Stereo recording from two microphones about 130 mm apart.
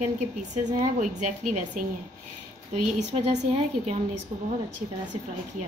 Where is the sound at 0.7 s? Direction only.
80° right.